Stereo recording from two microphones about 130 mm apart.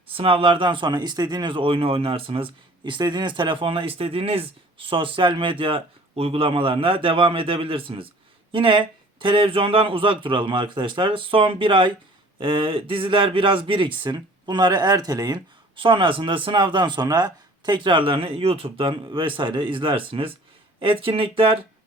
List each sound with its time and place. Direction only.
0.1 s speech: 45° right (ahead or behind)